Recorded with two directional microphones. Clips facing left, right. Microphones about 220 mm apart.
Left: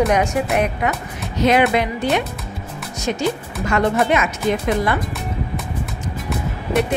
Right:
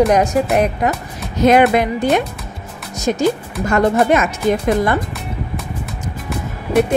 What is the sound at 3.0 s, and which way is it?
A woman's voice, 45° right (ahead or behind).